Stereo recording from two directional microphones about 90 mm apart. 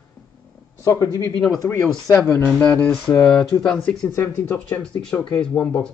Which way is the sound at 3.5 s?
35° left (ahead or behind).